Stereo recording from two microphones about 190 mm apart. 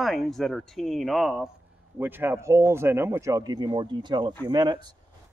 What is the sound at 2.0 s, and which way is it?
Speech, 10° right (ahead or behind).